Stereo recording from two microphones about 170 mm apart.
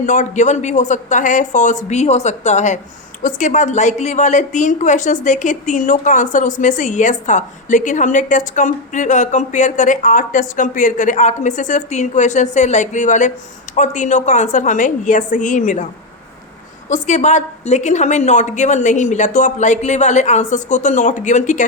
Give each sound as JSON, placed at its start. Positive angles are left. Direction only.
{"t": 0.0, "sound": "a woman's voice", "side_deg": 45}
{"t": 16.9, "sound": "a woman's voice", "side_deg": 45}